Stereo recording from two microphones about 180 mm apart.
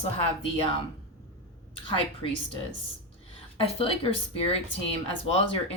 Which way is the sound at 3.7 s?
30° left (ahead or behind).